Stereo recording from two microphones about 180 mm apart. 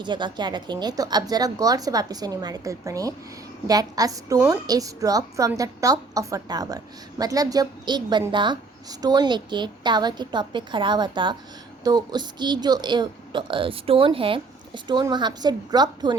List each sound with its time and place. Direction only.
0.0 s a woman's voice: 25° right (ahead or behind)